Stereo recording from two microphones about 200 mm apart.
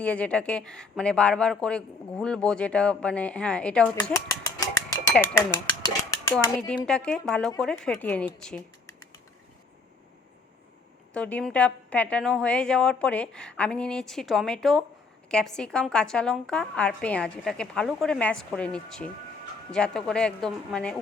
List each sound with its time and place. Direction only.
0.0 s speech: 5° left (ahead or behind)
4.1 s a sound: 15° left (ahead or behind)
5.8 s dishes: 15° left (ahead or behind)
6.8 s speech: 5° left (ahead or behind)
11.1 s speech: 5° left (ahead or behind)